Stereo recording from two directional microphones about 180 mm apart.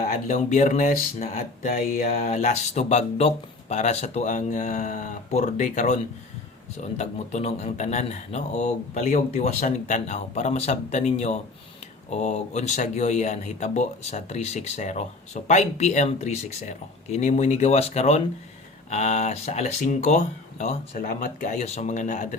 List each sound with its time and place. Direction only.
0.0 s speech: 45° left (ahead or behind)